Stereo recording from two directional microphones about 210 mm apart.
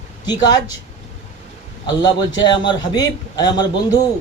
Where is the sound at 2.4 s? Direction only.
20° left (ahead or behind).